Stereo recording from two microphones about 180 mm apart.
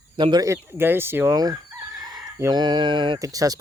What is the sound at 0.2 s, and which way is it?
Speech, 25° right (ahead or behind).